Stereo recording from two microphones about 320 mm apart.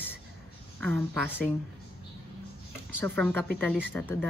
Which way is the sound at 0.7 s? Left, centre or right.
Centre.